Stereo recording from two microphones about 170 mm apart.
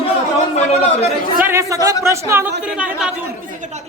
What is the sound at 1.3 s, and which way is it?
Speech, 15° right (ahead or behind).